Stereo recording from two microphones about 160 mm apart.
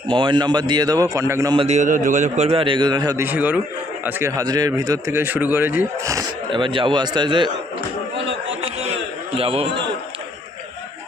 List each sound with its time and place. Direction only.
0.1 s speech: 30° right (ahead or behind)
1.5 s a man's voice: 45° right (ahead or behind)
2.5 s speech: 35° right (ahead or behind)
3.2 s a man's voice: 10° right (ahead or behind); by 7.5 s 30° right (ahead or behind)
8.6 s a sound: 40° right (ahead or behind)
9.4 s a man's voice: 35° right (ahead or behind)